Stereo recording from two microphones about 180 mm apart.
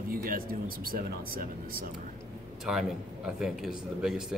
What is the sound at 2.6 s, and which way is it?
Speech, 5° right (ahead or behind).